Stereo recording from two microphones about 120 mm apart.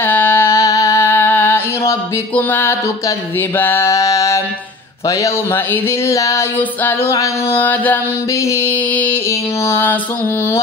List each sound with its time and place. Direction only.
0.0 s music: 15° left (ahead or behind)
3.3 s a sound: 15° left (ahead or behind)
5.0 s speech: 20° left (ahead or behind)
6.8 s singing: 20° left (ahead or behind)
9.7 s speech: 20° left (ahead or behind)